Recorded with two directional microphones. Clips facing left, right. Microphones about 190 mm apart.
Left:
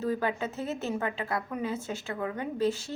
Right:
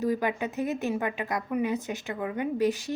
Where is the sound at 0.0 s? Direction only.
15° right (ahead or behind).